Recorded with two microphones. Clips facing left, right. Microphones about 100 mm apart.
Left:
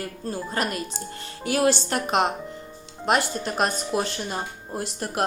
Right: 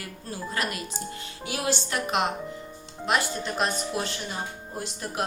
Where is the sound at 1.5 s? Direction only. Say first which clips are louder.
Left 9 dB; 55° left (ahead or behind).